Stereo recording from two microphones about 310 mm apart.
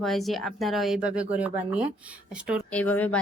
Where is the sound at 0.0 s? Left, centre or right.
Centre.